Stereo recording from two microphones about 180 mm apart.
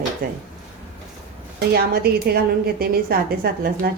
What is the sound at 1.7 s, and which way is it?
A woman's voice, 60° right (ahead or behind).